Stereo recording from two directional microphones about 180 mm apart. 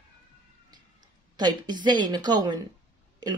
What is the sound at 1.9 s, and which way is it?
Speech, 25° right (ahead or behind).